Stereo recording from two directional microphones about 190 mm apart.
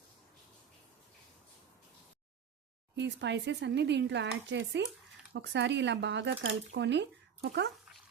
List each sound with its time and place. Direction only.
2.9 s speech: 65° right (ahead or behind)
6.7 s speech: 65° right (ahead or behind)